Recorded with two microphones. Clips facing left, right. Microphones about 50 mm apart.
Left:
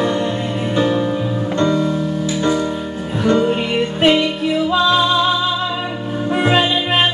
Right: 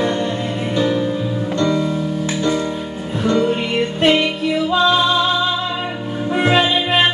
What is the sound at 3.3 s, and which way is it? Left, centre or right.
Music, centre.